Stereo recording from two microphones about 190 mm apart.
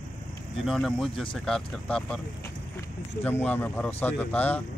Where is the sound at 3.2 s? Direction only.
10° left (ahead or behind).